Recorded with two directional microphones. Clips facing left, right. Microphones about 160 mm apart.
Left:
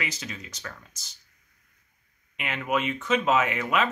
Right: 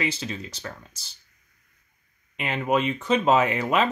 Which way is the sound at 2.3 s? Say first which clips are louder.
Right 4 dB; 30° right (ahead or behind).